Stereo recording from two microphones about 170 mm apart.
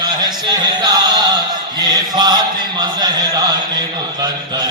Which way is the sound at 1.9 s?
25° right (ahead or behind).